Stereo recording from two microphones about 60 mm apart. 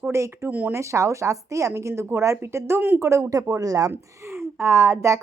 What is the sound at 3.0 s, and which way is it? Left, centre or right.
Speech, right.